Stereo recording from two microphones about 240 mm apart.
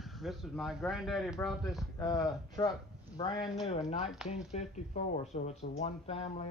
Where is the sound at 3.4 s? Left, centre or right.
Centre.